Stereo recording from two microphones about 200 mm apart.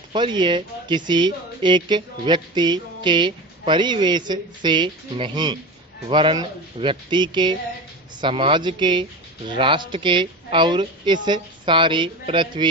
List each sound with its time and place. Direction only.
0.1 s speech: 25° right (ahead or behind)